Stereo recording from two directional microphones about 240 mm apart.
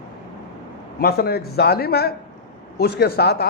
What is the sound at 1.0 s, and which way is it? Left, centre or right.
A man's voice, left.